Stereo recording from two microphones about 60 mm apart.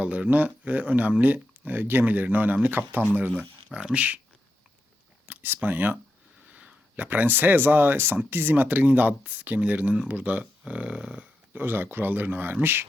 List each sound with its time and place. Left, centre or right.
0.0 s speech: right
3.7 s speech: centre
3.9 s speech: right
5.3 s speech: right
6.5 s speech: centre
11.5 s speech: right